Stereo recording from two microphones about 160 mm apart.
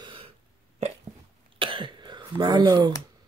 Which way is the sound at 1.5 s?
30° right (ahead or behind).